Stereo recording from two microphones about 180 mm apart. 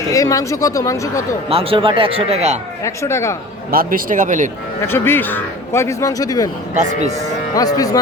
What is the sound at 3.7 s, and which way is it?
Speech, 55° right (ahead or behind).